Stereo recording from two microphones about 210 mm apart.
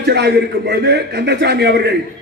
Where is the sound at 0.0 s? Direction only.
50° right (ahead or behind).